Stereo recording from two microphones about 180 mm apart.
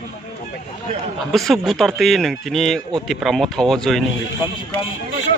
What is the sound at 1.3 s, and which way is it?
Speech, centre (ahead or behind).